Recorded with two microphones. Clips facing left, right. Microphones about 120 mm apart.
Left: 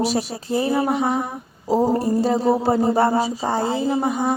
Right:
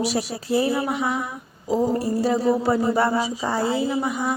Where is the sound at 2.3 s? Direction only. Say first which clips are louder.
Even; 30° left (ahead or behind).